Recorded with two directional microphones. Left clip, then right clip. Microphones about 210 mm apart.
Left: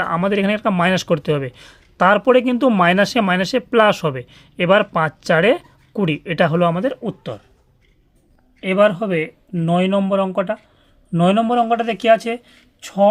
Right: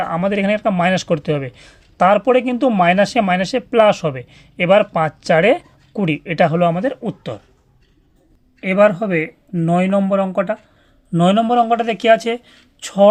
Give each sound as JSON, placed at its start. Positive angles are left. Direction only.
{"t": 0.0, "sound": "speech", "side_deg": 15}
{"t": 8.6, "sound": "speech", "side_deg": 0}
{"t": 12.8, "sound": "speech", "side_deg": -15}